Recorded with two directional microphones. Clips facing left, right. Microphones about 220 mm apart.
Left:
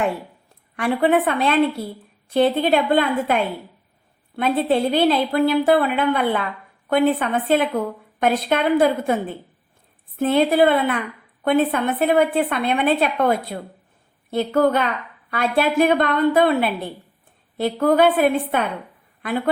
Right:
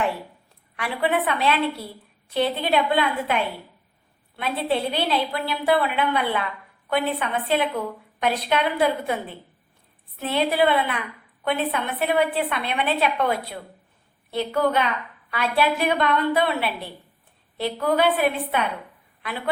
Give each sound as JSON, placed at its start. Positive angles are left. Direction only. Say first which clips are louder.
{"t": 0.8, "sound": "a woman's voice", "louder": "left 6 dB", "side_deg": 50}
{"t": 10.2, "sound": "a woman's voice", "louder": "left 6 dB", "side_deg": 50}